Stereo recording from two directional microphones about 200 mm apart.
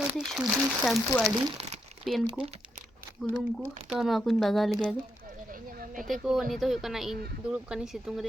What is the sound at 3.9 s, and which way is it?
Speech, centre (ahead or behind).